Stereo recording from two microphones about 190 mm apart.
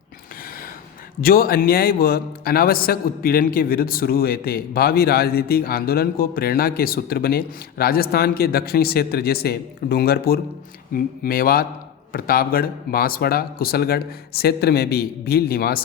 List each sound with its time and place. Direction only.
1.2 s a man's voice: 50° left (ahead or behind)